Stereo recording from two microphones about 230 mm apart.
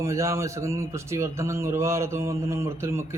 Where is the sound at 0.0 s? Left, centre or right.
Centre.